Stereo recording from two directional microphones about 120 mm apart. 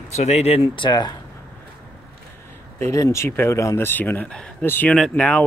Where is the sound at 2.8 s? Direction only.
25° left (ahead or behind).